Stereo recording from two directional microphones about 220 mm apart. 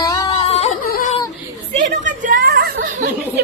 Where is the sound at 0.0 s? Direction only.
15° left (ahead or behind).